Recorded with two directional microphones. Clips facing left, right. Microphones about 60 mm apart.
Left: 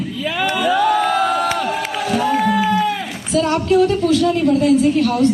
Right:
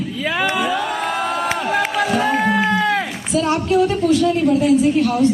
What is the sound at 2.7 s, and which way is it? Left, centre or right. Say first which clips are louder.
Run: even; right.